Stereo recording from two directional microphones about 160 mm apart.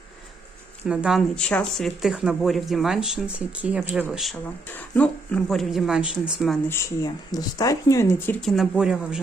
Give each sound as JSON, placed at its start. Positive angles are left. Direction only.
{"t": 0.9, "sound": "speech", "side_deg": -5}
{"t": 6.7, "sound": "speech", "side_deg": 20}
{"t": 8.4, "sound": "speech", "side_deg": 0}